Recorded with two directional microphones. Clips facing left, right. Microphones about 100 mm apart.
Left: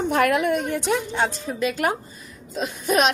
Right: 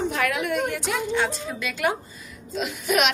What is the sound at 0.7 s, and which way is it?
A woman's voice, 30° left (ahead or behind).